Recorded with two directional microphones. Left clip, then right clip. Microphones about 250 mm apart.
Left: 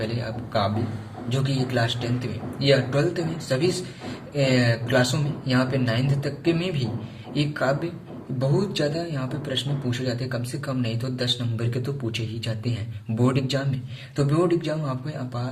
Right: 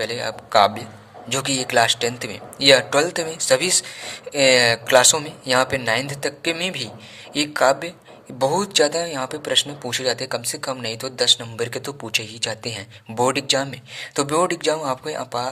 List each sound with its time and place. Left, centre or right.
0.0 s a man's voice: right